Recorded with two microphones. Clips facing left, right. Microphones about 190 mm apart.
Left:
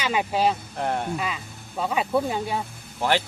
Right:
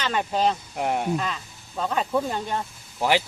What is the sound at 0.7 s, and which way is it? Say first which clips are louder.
Speech: right 1 dB; 10° right (ahead or behind).